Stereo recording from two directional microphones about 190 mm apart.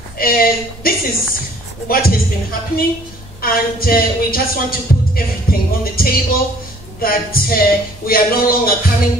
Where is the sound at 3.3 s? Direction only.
50° left (ahead or behind).